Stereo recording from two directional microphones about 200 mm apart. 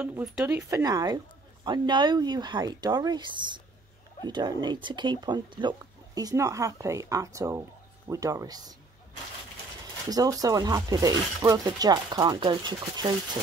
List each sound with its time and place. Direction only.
0.0 s speech: 5° right (ahead or behind)
10.0 s speech: 20° right (ahead or behind)